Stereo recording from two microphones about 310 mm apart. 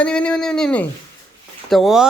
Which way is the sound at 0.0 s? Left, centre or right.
Centre.